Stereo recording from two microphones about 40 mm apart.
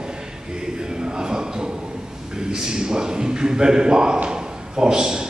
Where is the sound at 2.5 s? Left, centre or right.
Centre.